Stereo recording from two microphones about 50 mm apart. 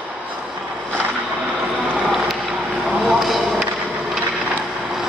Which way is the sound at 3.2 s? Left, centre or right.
Centre.